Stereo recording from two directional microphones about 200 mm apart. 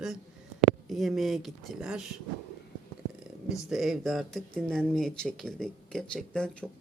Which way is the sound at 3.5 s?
Centre (ahead or behind).